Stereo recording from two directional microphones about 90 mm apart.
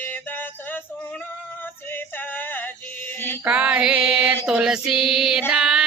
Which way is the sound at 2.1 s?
20° left (ahead or behind).